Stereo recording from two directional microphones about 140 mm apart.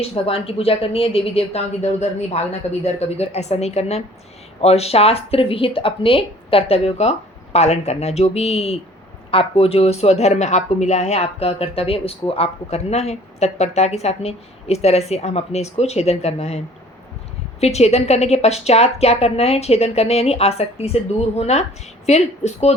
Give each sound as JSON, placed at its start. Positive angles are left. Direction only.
{"t": 0.0, "sound": "a woman's voice", "side_deg": 45}
{"t": 17.6, "sound": "a woman's voice", "side_deg": 50}